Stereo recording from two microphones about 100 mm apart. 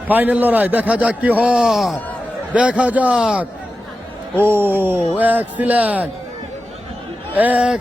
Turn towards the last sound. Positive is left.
turn(degrees=-10)  # may be behind; listen again after turning